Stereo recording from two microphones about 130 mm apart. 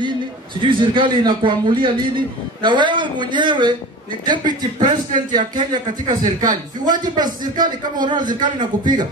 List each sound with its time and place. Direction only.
0.6 s a man's voice: 40° right (ahead or behind)